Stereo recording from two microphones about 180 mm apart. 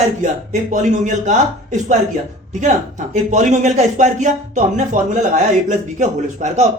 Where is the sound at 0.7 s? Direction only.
40° right (ahead or behind).